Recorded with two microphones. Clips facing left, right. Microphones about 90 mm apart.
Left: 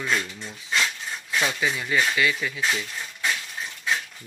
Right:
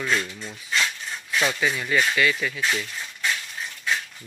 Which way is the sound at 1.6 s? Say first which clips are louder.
Right 1 dB; 20° left (ahead or behind).